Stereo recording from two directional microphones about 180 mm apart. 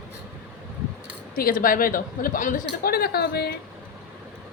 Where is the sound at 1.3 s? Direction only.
55° left (ahead or behind).